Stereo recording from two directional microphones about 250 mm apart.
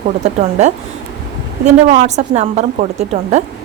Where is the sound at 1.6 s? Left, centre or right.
Right.